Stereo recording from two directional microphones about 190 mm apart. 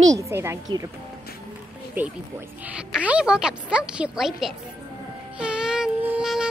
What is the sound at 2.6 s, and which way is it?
A woman's voice, 5° right (ahead or behind).